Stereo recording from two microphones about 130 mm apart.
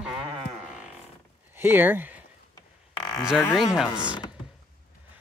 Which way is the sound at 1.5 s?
15° right (ahead or behind).